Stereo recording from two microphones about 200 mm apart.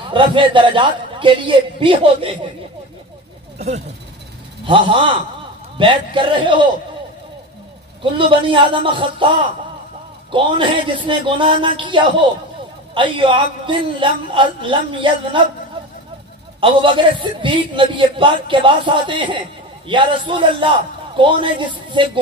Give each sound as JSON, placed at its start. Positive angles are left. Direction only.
{"t": 0.1, "sound": "a man's voice", "side_deg": -25}
{"t": 3.5, "sound": "a man's voice", "side_deg": -35}
{"t": 8.0, "sound": "a man's voice", "side_deg": -25}
{"t": 16.6, "sound": "a man's voice", "side_deg": -25}